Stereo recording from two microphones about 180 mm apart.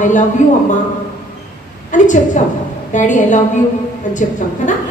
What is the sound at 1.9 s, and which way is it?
A woman's voice, 45° left (ahead or behind).